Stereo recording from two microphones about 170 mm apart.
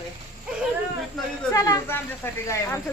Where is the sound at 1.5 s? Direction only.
15° left (ahead or behind).